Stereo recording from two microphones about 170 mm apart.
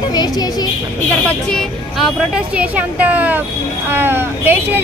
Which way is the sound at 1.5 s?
5° right (ahead or behind).